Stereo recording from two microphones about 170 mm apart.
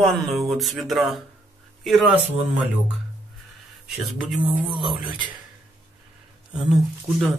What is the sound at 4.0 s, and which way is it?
Speech, centre (ahead or behind).